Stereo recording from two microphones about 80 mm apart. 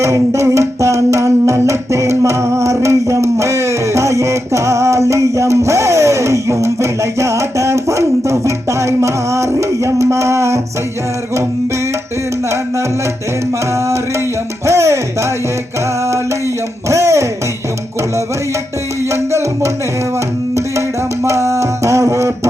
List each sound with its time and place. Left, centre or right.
0.0 s music: right
14.7 s music: right
16.9 s music: right
19.1 s music: right
21.2 s music: right